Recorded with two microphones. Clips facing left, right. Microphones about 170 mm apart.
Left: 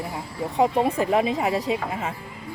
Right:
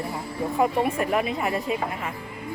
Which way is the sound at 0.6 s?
25° left (ahead or behind).